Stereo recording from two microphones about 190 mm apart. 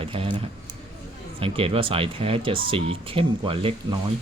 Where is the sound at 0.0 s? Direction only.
30° right (ahead or behind).